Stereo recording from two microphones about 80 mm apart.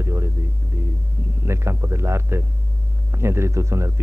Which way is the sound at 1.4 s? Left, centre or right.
Right.